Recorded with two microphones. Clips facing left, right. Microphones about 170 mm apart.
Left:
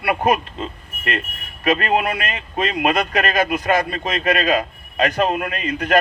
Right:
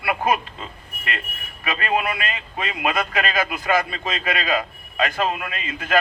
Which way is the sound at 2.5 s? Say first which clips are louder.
Left 7 dB; 70° left (ahead or behind).